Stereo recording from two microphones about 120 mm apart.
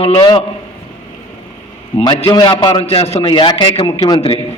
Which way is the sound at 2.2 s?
40° left (ahead or behind).